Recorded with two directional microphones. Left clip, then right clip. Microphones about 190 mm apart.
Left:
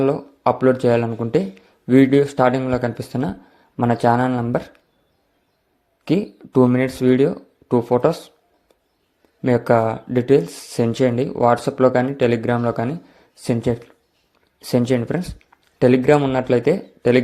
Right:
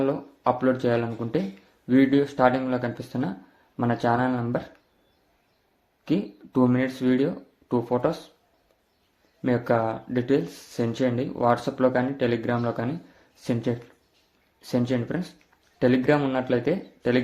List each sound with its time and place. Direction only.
0.0 s speech: 35° left (ahead or behind)
6.5 s speech: 35° left (ahead or behind)
9.4 s speech: 35° left (ahead or behind)